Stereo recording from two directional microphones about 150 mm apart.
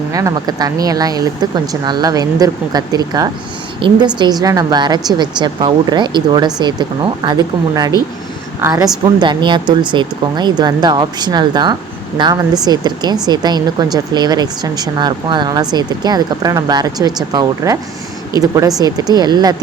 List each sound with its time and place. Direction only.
0.1 s speech: 20° right (ahead or behind)